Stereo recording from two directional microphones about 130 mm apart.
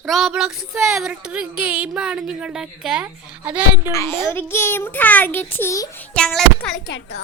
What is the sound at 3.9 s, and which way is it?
A child's voice, 25° left (ahead or behind).